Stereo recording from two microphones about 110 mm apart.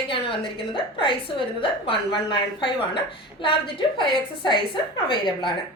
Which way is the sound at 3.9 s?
45° left (ahead or behind).